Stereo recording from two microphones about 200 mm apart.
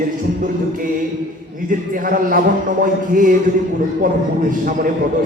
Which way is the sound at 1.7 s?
45° right (ahead or behind).